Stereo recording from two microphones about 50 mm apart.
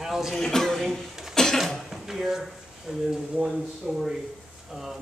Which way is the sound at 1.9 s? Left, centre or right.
Centre.